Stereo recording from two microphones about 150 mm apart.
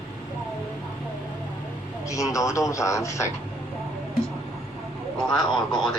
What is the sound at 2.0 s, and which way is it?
A man's voice, 20° left (ahead or behind).